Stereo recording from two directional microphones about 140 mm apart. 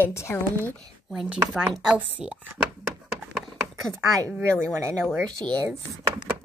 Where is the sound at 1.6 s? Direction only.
Centre (ahead or behind).